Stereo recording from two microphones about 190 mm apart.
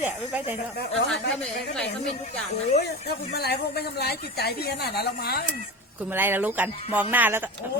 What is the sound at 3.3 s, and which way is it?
A woman's voice, 55° left (ahead or behind).